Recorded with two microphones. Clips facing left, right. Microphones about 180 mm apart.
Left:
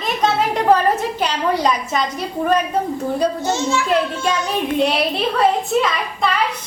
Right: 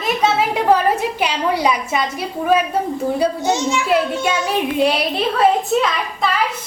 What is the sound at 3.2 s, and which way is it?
Speech, 15° right (ahead or behind).